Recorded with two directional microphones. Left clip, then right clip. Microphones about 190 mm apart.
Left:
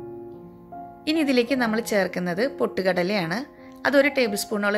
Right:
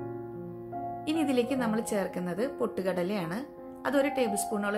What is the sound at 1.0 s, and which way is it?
A woman's voice, 15° left (ahead or behind).